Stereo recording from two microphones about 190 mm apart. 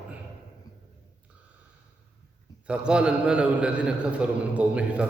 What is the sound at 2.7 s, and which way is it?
A man's voice, 5° right (ahead or behind).